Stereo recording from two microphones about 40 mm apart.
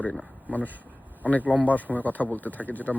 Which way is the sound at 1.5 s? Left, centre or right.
Left.